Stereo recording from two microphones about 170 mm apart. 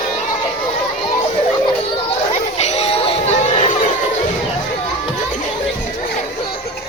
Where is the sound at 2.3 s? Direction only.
40° left (ahead or behind).